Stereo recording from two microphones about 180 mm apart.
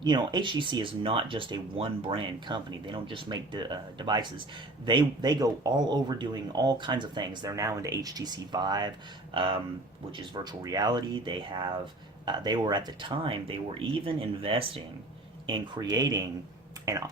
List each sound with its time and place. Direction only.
0.0 s speech: 25° right (ahead or behind)